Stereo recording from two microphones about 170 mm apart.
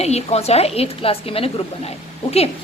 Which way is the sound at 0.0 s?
40° left (ahead or behind).